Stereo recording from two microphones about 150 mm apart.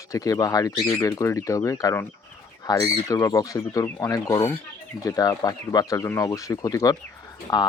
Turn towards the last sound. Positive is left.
turn(degrees=25)  # may be behind; listen again after turning